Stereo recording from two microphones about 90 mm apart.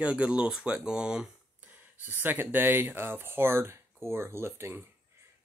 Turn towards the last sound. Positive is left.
turn(degrees=-30)  # may be behind; listen again after turning